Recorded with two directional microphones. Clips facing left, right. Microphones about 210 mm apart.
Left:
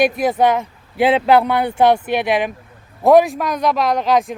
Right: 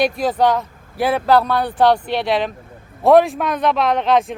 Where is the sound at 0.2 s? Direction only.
20° left (ahead or behind).